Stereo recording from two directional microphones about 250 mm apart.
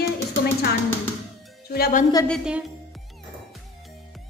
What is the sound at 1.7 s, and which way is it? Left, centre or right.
Speech, left.